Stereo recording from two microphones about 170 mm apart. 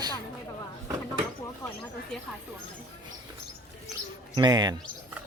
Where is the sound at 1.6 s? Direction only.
20° left (ahead or behind).